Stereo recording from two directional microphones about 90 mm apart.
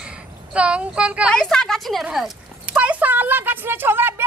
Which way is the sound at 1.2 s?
10° left (ahead or behind).